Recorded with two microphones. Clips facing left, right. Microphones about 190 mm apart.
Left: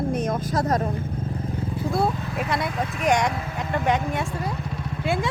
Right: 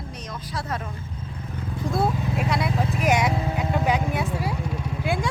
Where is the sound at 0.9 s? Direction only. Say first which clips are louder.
Left 8 dB; 55° left (ahead or behind); by 1.7 s 35° left (ahead or behind).